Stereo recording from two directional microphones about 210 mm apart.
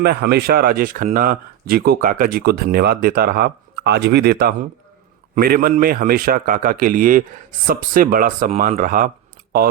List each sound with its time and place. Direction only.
0.0 s speech: 50° right (ahead or behind)